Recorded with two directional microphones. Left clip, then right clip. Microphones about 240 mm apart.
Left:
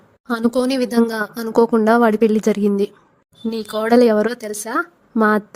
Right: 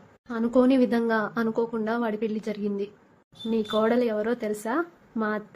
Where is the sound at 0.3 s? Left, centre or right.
Left.